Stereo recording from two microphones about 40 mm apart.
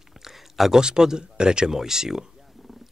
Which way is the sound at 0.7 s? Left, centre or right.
Centre.